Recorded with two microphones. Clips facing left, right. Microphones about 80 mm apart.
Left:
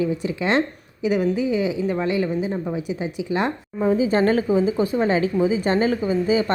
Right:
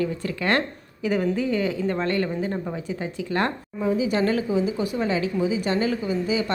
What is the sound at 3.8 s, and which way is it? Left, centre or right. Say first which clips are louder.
Speech: left 4 dB; left.